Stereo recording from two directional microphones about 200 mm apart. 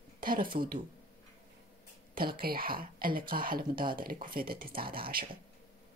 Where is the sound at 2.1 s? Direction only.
50° right (ahead or behind).